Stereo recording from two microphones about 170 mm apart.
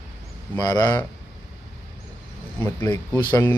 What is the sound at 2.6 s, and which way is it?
Speech, 10° left (ahead or behind).